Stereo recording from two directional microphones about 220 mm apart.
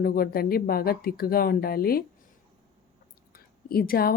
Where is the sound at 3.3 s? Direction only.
40° left (ahead or behind).